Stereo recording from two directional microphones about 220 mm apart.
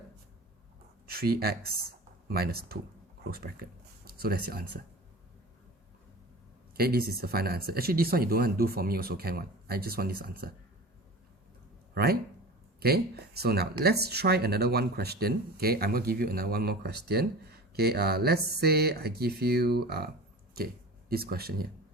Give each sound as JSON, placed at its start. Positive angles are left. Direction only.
{"t": 1.0, "sound": "speech", "side_deg": -45}
{"t": 6.7, "sound": "speech", "side_deg": -45}
{"t": 12.8, "sound": "speech", "side_deg": -45}
{"t": 21.1, "sound": "speech", "side_deg": -45}